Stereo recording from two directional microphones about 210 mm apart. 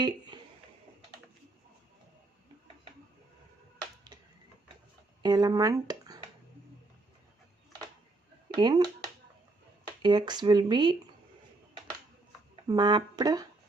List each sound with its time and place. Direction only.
0.0 s a sound: 20° right (ahead or behind)
5.2 s speech: 20° right (ahead or behind)
8.5 s speech: 20° right (ahead or behind)
10.0 s speech: 20° right (ahead or behind)
12.6 s speech: 20° right (ahead or behind)